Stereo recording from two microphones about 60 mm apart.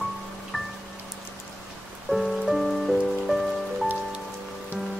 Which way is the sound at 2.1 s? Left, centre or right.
Centre.